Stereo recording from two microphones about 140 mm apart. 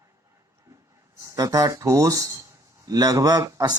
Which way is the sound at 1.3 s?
25° right (ahead or behind).